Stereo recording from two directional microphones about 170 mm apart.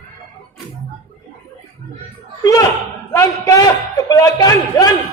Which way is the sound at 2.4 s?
20° left (ahead or behind).